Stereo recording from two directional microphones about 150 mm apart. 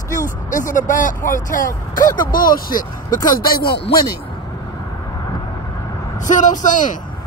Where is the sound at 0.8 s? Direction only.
60° left (ahead or behind).